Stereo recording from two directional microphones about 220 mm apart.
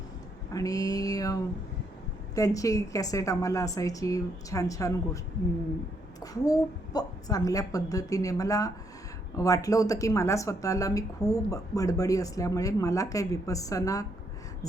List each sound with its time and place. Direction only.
0.5 s a sound: 15° left (ahead or behind)
2.3 s speech: 15° left (ahead or behind)
6.4 s speech: 15° left (ahead or behind)